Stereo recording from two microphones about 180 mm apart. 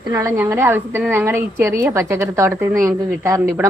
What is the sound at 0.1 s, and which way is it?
A woman's voice, 10° right (ahead or behind).